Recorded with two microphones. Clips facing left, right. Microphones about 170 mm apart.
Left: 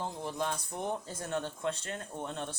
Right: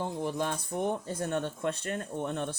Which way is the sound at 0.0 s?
60° right (ahead or behind).